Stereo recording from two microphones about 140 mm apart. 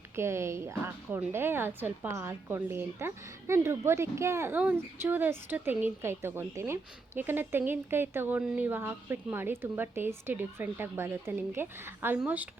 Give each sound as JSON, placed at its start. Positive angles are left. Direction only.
{"t": 0.2, "sound": "speech", "side_deg": -20}